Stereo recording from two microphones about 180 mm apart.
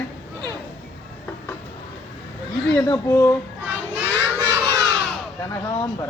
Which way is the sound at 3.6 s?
10° right (ahead or behind).